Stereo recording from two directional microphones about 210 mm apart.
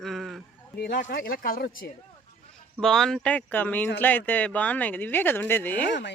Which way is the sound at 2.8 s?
Centre (ahead or behind).